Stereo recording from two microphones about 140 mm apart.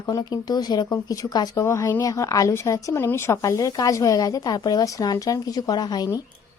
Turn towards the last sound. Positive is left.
turn(degrees=30)  # may be behind; listen again after turning